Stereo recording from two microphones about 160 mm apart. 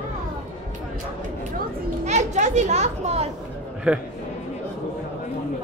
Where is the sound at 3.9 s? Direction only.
10° right (ahead or behind).